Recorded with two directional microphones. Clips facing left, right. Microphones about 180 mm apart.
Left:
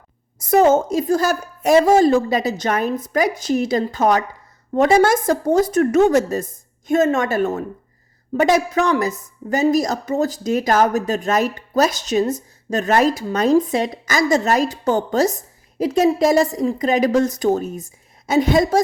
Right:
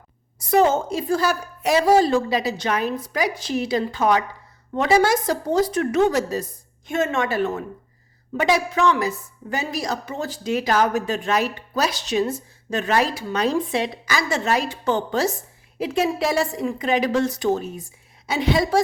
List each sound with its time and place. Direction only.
0.4 s a woman's voice: 45° left (ahead or behind)